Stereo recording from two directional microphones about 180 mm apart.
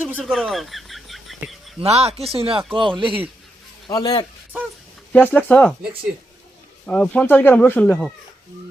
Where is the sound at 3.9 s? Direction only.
20° left (ahead or behind).